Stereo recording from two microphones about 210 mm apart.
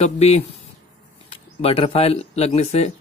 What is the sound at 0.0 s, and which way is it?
Speech, 30° left (ahead or behind).